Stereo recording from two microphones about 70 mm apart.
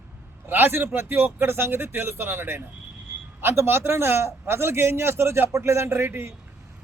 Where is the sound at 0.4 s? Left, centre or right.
Right.